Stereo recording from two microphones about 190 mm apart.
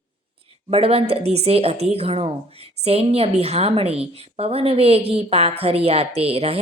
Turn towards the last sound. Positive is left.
turn(degrees=-30)  # may be behind; listen again after turning